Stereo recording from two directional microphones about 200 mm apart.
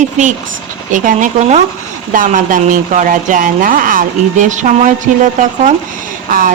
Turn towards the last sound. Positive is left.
turn(degrees=-45)  # may be behind; listen again after turning